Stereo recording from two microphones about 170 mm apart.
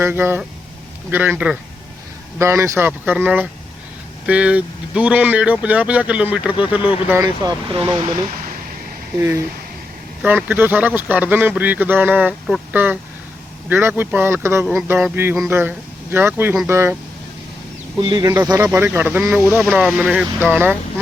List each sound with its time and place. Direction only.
0.0 s speech: 15° right (ahead or behind)
7.7 s speech: 25° right (ahead or behind)
10.5 s speech: 10° right (ahead or behind)
18.0 s speech: 25° right (ahead or behind)